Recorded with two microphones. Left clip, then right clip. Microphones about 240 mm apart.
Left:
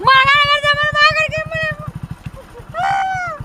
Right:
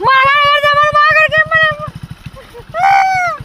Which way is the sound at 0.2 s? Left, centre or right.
Centre.